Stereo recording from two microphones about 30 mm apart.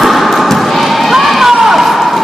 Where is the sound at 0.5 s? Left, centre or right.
Centre.